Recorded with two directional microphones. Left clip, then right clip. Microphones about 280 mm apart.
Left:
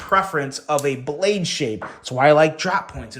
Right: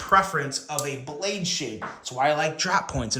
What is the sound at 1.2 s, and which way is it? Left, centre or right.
A man's voice, left.